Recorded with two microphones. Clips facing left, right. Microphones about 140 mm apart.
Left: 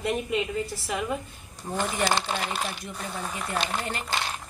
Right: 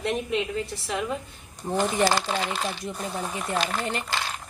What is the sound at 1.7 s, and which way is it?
Speech, 20° right (ahead or behind).